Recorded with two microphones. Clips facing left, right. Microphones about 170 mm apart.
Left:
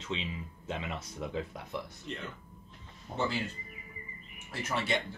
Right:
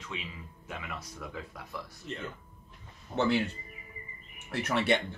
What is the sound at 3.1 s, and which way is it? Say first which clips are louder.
Speech: right 6 dB; 65° right (ahead or behind).